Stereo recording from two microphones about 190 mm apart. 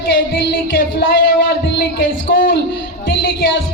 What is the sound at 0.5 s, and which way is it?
Speech, 50° left (ahead or behind).